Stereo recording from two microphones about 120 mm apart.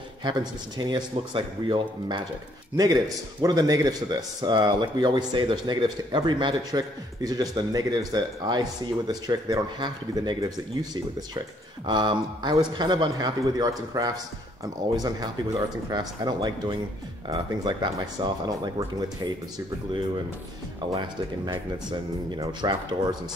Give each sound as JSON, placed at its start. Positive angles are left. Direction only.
{"t": 0.2, "sound": "speech", "side_deg": -40}
{"t": 20.9, "sound": "speech", "side_deg": -40}